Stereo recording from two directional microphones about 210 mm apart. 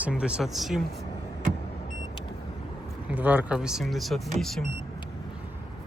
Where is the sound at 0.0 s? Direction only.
5° right (ahead or behind).